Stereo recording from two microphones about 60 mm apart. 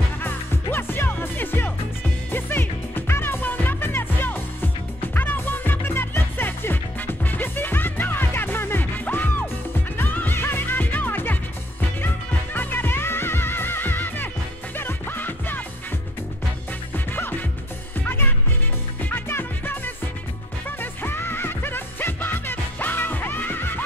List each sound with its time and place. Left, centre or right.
0.2 s music: left
12.5 s music: left
16.9 s music: left